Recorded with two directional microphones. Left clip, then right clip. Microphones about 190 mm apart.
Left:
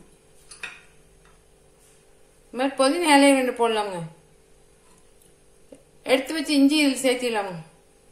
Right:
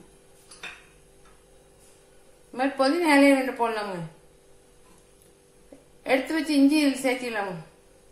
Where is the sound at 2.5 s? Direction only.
40° left (ahead or behind).